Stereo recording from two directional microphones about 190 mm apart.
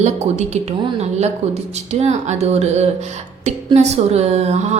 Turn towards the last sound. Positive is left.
turn(degrees=-35)  # may be behind; listen again after turning